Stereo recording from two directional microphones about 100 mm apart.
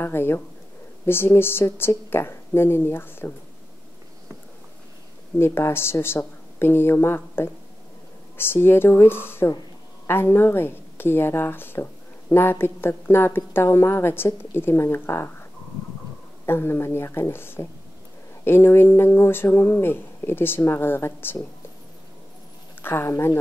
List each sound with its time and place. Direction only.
0.0 s a woman's voice: 25° left (ahead or behind)
5.4 s a woman's voice: 25° left (ahead or behind)
16.4 s a woman's voice: 25° left (ahead or behind)
22.8 s a woman's voice: 25° left (ahead or behind)